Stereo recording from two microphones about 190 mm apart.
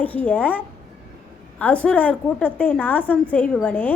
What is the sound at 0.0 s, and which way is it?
A woman's voice, 10° left (ahead or behind).